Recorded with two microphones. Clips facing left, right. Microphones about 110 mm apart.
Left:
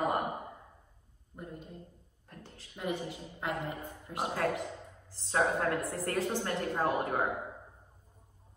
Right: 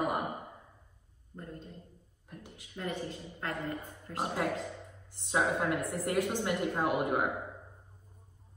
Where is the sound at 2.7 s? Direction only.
15° left (ahead or behind).